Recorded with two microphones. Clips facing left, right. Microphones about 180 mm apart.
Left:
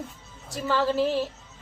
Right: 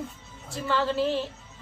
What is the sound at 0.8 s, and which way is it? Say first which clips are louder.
Music: left 2 dB; 10° left (ahead or behind).